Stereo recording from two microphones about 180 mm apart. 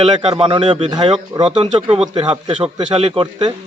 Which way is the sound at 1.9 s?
Centre (ahead or behind).